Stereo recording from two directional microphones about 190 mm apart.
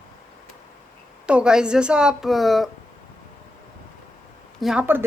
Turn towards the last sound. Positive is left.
turn(degrees=-10)  # may be behind; listen again after turning